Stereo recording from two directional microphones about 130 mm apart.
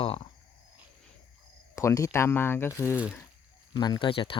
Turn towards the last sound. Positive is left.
turn(degrees=40)  # may be behind; listen again after turning